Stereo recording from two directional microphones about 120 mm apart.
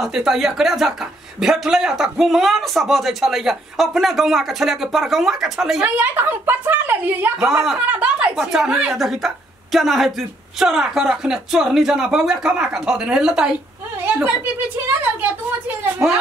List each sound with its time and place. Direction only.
0.0 s speech: 5° right (ahead or behind)
5.9 s speech: 15° right (ahead or behind)